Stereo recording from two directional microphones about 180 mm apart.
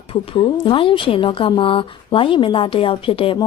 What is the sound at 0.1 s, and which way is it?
A woman's voice, 30° left (ahead or behind).